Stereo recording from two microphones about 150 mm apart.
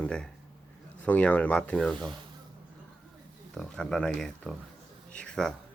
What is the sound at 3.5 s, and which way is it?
Speech, 5° left (ahead or behind).